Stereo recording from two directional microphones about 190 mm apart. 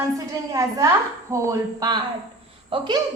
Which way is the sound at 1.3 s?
20° right (ahead or behind).